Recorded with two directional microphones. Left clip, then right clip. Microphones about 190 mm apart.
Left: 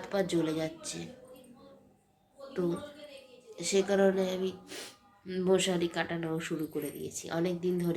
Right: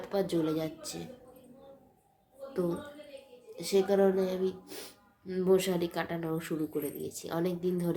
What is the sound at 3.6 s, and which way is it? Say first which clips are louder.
A woman's voice: right 1 dB; 5° right (ahead or behind).